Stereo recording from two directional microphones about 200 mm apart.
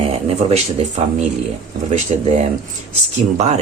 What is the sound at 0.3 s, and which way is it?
Speech, 30° right (ahead or behind).